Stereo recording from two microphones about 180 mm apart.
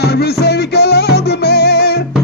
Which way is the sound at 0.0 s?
65° left (ahead or behind).